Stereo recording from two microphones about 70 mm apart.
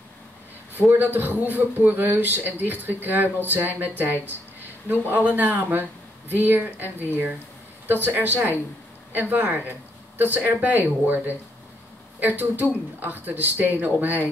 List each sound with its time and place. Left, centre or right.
0.7 s a man's voice: right